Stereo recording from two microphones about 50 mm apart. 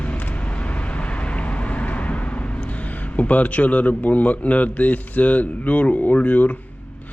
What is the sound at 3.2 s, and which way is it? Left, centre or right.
Speech, left.